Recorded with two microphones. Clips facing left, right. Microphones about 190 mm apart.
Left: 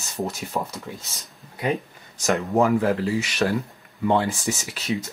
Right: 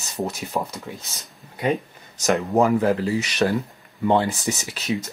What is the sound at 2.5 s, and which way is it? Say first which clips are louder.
Speech: right 1 dB; 20° right (ahead or behind).